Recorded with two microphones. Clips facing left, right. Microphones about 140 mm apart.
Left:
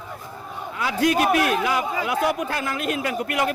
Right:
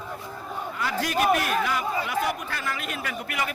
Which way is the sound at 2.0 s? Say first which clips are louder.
Left 5 dB; 90° left.